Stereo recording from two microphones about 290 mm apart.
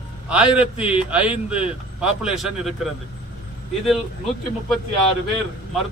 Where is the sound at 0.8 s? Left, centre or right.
Centre.